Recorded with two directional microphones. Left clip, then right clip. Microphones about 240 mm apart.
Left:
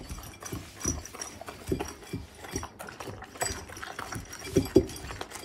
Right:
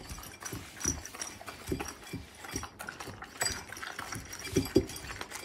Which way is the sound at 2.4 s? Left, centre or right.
Centre.